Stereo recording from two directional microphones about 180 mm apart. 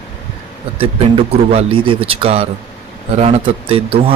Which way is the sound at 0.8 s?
30° right (ahead or behind).